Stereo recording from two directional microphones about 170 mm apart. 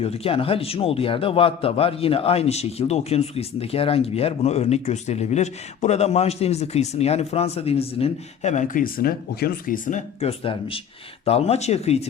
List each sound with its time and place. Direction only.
0.0 s a man's voice: 35° left (ahead or behind)